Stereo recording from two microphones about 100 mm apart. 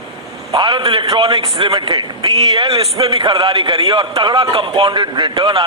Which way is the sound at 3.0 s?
55° right (ahead or behind).